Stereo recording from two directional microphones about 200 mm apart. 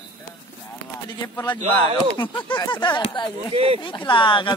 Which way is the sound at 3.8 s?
25° left (ahead or behind).